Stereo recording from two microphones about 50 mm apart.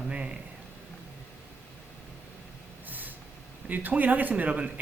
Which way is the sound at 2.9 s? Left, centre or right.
Right.